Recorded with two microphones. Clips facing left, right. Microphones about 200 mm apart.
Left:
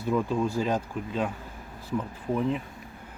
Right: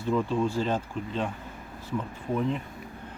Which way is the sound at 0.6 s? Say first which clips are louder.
Left 1 dB; 10° left (ahead or behind).